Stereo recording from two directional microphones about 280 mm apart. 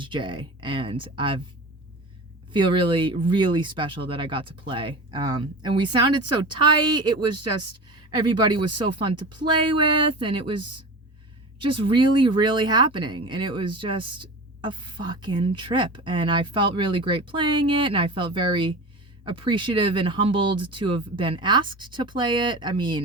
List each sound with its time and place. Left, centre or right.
0.0 s speech: centre
2.5 s speech: centre